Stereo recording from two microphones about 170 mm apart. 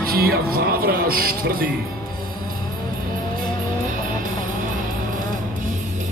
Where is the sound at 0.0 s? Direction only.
60° right (ahead or behind).